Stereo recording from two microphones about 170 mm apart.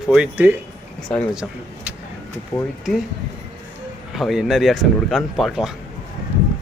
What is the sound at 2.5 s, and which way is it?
Speech, 20° left (ahead or behind).